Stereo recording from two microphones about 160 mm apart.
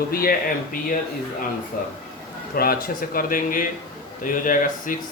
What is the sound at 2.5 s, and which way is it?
Speech, 65° left (ahead or behind).